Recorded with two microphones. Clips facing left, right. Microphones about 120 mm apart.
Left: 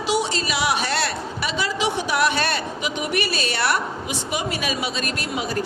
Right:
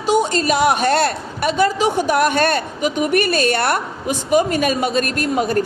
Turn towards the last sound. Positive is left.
turn(degrees=-50)  # may be behind; listen again after turning